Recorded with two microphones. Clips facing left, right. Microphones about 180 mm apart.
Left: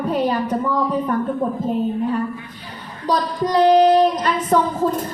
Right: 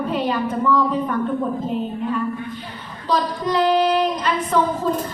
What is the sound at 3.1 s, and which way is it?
A woman's voice, 40° left (ahead or behind).